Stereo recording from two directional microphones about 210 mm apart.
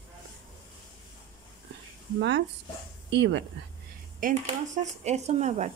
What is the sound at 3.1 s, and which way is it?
Speech, 55° right (ahead or behind).